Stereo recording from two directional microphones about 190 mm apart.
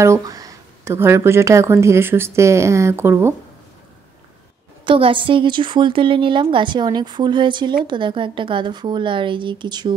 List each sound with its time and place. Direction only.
0.0 s speech: 15° right (ahead or behind)
4.8 s a woman's voice: 25° right (ahead or behind)